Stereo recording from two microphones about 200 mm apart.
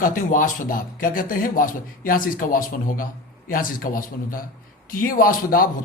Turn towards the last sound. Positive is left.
turn(degrees=45)  # may be behind; listen again after turning